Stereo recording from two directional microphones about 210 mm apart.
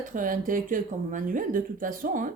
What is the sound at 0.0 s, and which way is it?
Speech, 40° right (ahead or behind).